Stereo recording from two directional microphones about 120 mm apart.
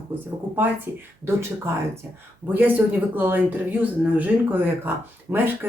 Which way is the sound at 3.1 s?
15° right (ahead or behind).